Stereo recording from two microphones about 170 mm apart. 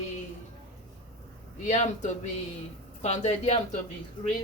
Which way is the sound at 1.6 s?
45° left (ahead or behind).